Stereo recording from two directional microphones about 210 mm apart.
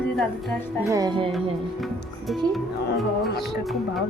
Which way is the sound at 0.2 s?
Centre (ahead or behind).